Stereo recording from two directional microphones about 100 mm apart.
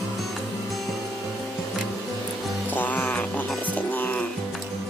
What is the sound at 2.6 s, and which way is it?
Music, 15° left (ahead or behind).